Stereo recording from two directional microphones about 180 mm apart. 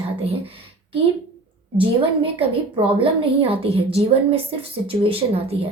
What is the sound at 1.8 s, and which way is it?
A woman's voice, 30° right (ahead or behind).